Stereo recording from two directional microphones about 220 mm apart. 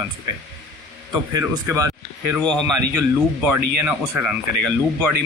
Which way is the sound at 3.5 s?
10° right (ahead or behind).